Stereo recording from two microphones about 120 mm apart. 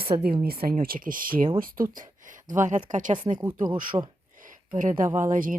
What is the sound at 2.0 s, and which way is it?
Speech, 90° right.